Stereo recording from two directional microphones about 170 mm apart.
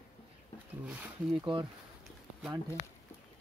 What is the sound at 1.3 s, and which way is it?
Speech, 30° right (ahead or behind).